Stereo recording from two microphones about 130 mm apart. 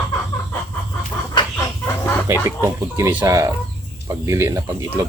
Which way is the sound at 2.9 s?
20° right (ahead or behind).